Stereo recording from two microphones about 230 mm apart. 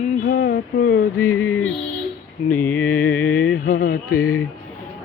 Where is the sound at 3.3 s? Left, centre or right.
Left.